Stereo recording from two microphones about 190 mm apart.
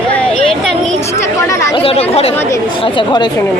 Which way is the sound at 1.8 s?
30° left (ahead or behind).